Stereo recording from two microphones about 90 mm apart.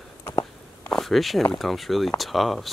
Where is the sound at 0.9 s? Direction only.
Centre (ahead or behind).